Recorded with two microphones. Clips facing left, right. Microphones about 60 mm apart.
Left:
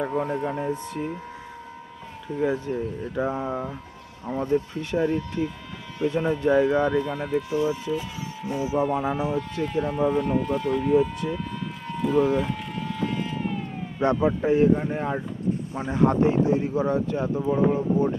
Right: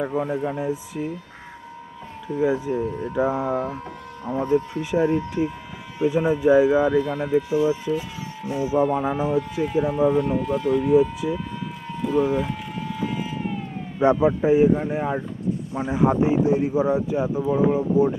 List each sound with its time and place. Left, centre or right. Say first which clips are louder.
0.0 s speech: right 1 dB; centre
2.2 s speech: right 3 dB; centre
3.4 s speech: right 5 dB; right
4.3 s speech: right 3 dB; centre
4.8 s speech: right 3 dB; centre
11.9 s a sound: even; centre
14.0 s speech: right 4 dB; centre